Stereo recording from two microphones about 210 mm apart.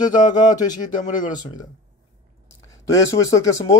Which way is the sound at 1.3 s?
20° left (ahead or behind).